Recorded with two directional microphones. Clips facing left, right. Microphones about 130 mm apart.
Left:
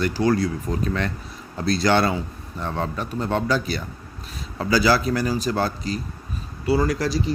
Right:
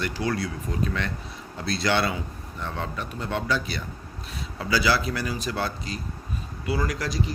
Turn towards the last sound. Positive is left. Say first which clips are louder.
# left 6 dB
turn(degrees=35)  # may be behind; listen again after turning